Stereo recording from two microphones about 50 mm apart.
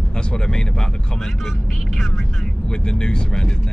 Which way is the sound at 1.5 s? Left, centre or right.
Centre.